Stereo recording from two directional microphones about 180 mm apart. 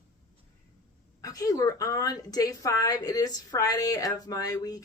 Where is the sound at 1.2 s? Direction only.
20° left (ahead or behind).